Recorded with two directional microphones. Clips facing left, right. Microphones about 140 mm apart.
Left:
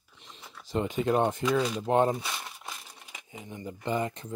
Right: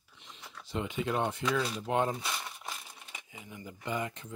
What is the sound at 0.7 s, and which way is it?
Speech, 40° left (ahead or behind).